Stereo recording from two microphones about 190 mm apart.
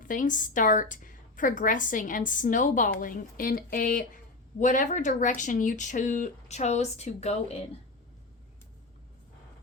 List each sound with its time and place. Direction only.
0.0 s a woman's voice: 45° left (ahead or behind)